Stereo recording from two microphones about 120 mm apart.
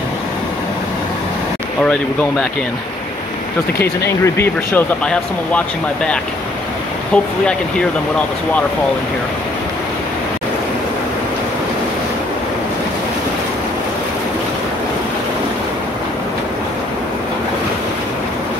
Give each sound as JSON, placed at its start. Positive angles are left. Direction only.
{"t": 4.2, "sound": "speech", "side_deg": 20}
{"t": 5.0, "sound": "speech", "side_deg": 10}